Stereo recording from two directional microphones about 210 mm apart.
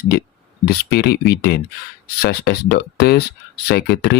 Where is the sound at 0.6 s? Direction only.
50° left (ahead or behind).